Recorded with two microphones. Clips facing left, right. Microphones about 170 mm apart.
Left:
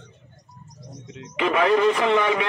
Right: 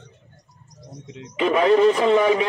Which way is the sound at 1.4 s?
35° right (ahead or behind).